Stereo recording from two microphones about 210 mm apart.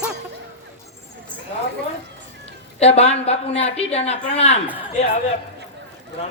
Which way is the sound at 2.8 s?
30° left (ahead or behind).